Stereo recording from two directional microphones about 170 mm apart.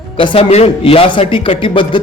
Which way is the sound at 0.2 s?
30° left (ahead or behind).